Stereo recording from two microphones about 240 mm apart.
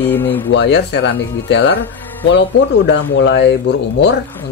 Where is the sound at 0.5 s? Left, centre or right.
Left.